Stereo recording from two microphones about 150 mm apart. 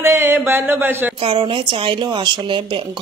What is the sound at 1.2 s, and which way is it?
Speech, 35° right (ahead or behind).